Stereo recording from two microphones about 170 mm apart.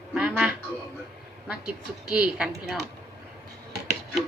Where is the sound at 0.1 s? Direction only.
5° right (ahead or behind).